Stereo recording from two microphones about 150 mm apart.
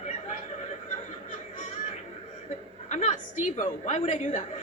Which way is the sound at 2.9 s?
50° left (ahead or behind).